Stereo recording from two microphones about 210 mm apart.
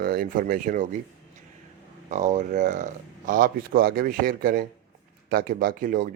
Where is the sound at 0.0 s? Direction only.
45° right (ahead or behind).